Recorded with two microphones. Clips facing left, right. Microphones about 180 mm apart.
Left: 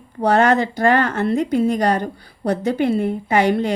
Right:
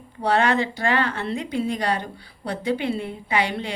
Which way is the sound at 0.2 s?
45° left (ahead or behind).